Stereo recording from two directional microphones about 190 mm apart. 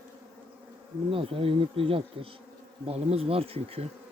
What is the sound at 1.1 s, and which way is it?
Speech, 30° right (ahead or behind).